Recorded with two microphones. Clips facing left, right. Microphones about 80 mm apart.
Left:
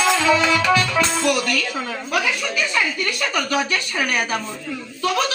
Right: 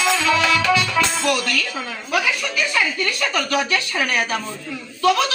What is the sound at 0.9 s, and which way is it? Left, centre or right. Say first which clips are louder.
Music: left 1 dB; left.